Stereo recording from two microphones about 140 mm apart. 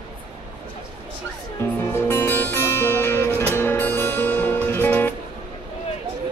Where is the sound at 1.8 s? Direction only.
15° left (ahead or behind).